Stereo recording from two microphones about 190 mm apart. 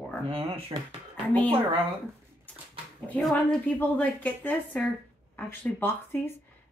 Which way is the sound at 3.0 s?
5° left (ahead or behind).